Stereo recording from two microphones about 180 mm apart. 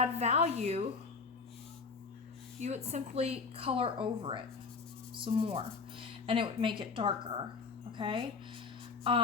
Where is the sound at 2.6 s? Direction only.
35° right (ahead or behind).